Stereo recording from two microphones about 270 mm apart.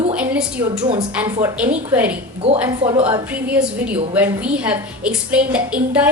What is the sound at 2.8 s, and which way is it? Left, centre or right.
Speech, centre.